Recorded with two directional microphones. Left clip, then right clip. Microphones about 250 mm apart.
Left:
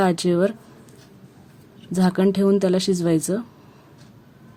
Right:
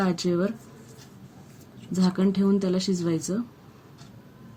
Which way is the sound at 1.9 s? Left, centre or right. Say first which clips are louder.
Left 6 dB; left.